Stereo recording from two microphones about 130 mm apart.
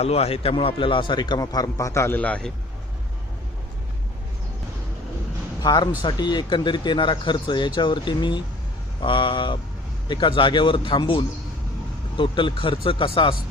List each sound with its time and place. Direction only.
0.0 s speech: 55° left (ahead or behind); by 2.5 s 10° left (ahead or behind)
5.6 s speech: 35° left (ahead or behind)